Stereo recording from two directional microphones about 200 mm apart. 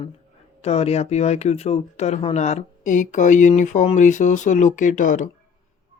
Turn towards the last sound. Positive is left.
turn(degrees=40)  # may be behind; listen again after turning